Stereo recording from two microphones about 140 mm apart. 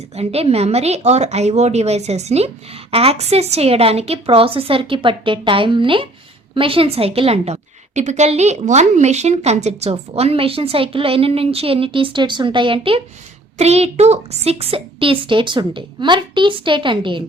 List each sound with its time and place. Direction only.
0.2 s a woman's voice: 45° right (ahead or behind)
13.6 s a woman's voice: 50° right (ahead or behind)